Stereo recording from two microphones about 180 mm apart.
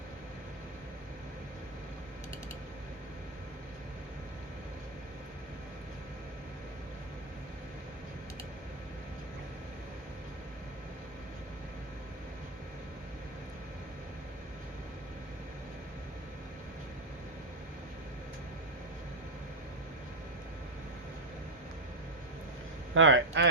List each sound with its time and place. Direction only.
23.0 s speech: 90° right